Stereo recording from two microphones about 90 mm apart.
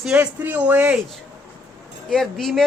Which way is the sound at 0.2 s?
20° right (ahead or behind).